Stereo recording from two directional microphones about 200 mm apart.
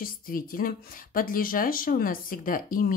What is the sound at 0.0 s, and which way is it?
Speech, 45° left (ahead or behind).